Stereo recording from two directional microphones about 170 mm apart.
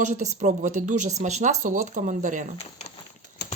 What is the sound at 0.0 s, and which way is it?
Speech, 45° right (ahead or behind).